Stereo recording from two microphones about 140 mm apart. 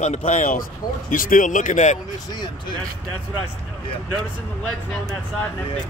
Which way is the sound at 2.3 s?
35° left (ahead or behind).